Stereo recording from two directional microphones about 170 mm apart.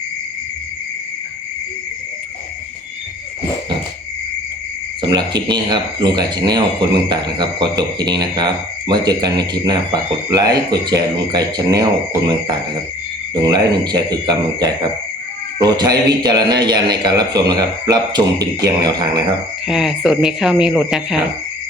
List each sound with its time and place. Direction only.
5.0 s speech: 25° right (ahead or behind)
13.3 s speech: 25° right (ahead or behind)
19.6 s speech: centre (ahead or behind)